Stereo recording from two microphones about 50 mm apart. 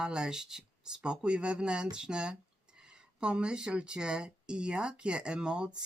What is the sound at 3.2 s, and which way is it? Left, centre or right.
Speech, right.